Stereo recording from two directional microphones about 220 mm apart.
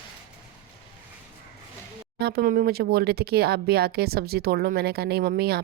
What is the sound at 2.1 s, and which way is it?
Speech, 45° right (ahead or behind).